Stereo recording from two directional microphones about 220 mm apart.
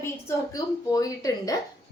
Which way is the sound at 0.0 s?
15° left (ahead or behind).